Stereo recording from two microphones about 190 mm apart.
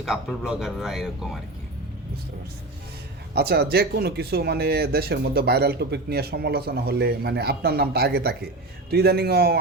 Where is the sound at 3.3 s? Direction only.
55° right (ahead or behind).